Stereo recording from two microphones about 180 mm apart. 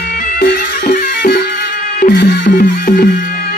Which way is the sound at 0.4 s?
55° left (ahead or behind).